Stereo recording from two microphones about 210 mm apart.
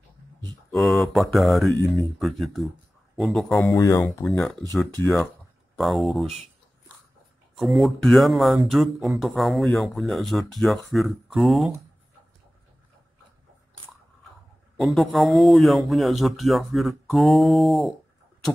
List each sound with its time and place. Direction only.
0.7 s speech: centre (ahead or behind)
3.7 s speech: 15° left (ahead or behind)
4.3 s speech: 5° left (ahead or behind)
7.5 s speech: centre (ahead or behind)
14.8 s speech: centre (ahead or behind)